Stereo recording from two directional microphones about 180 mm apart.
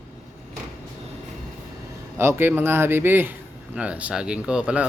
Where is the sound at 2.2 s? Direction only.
15° right (ahead or behind).